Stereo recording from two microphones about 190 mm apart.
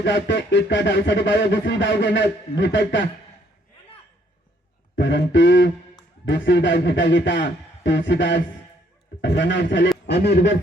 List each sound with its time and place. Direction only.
0.0 s speech: 70° left (ahead or behind)
4.9 s speech: 70° left (ahead or behind)